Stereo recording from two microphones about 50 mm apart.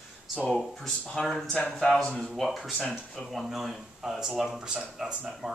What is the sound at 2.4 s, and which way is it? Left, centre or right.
Speech, centre.